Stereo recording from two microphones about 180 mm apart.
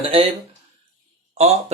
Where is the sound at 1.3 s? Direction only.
35° right (ahead or behind).